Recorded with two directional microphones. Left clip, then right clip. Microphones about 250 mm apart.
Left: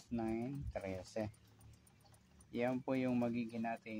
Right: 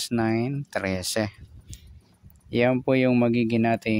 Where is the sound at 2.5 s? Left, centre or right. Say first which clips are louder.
Right 17 dB; right.